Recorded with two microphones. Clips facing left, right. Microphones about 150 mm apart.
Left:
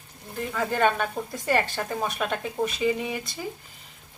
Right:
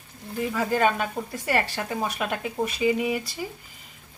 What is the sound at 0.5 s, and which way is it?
Speech, 5° right (ahead or behind).